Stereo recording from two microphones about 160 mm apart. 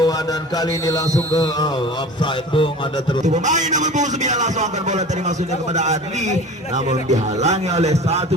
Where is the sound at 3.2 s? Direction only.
50° right (ahead or behind).